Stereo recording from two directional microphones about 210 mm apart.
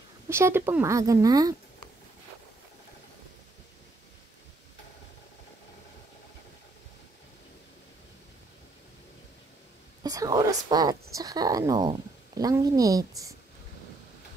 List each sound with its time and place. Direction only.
0.3 s speech: 10° right (ahead or behind)
10.0 s speech: 15° right (ahead or behind)